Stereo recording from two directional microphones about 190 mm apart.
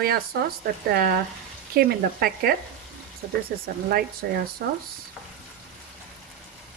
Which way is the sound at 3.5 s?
55° right (ahead or behind).